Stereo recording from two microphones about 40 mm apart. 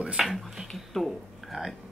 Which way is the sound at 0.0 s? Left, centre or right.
Centre.